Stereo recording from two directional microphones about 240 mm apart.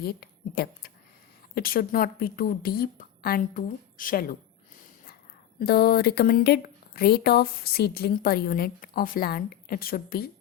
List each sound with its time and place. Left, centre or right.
0.0 s a woman's voice: left
5.5 s a woman's voice: left